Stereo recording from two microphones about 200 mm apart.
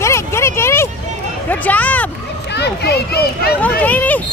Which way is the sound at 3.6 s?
5° left (ahead or behind).